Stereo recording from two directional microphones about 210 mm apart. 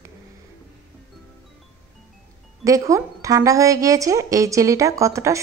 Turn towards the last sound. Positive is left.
turn(degrees=-15)  # may be behind; listen again after turning